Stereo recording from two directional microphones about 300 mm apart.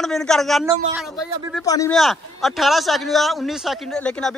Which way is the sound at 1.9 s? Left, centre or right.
Centre.